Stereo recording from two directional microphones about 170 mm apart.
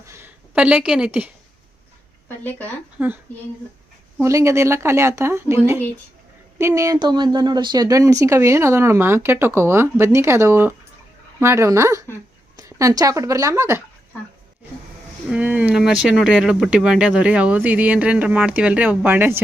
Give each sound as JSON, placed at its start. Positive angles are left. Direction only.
{"t": 0.0, "sound": "a sound", "side_deg": -15}
{"t": 4.2, "sound": "a woman's voice", "side_deg": -15}
{"t": 15.3, "sound": "speech", "side_deg": -10}